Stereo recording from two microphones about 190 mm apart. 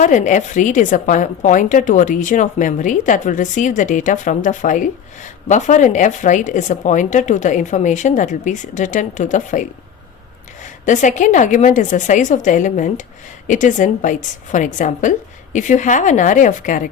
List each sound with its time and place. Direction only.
0.0 s a woman's voice: 40° left (ahead or behind)